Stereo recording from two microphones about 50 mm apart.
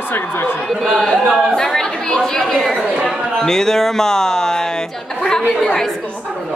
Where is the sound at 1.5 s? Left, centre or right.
Centre.